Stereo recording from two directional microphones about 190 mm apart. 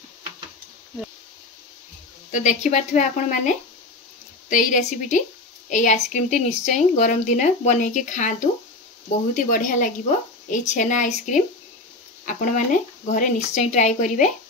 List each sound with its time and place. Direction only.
2.3 s speech: 40° left (ahead or behind)